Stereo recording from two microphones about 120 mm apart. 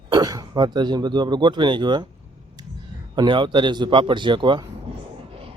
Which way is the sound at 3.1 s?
40° right (ahead or behind).